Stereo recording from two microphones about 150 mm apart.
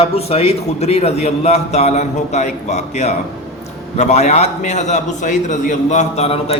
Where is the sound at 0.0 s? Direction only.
40° left (ahead or behind).